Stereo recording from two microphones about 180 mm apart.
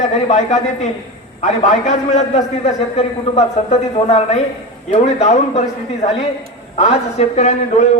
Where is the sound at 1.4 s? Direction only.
40° left (ahead or behind).